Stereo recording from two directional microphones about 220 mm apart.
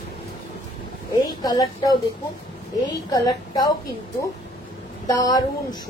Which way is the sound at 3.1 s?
15° left (ahead or behind).